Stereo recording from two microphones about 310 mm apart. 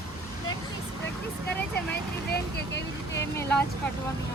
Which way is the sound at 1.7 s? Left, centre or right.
Left.